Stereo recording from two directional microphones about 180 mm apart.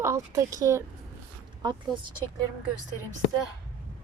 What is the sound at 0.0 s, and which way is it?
Speech, 15° right (ahead or behind).